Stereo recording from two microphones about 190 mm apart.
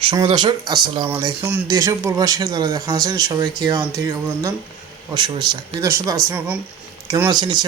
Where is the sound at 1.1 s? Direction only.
15° right (ahead or behind).